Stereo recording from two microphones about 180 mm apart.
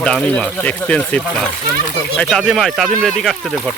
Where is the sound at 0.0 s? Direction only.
5° left (ahead or behind).